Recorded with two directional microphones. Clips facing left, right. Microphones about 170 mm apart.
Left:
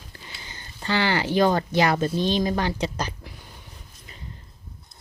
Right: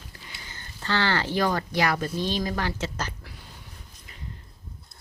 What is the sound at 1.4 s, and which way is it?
Speech, 25° left (ahead or behind).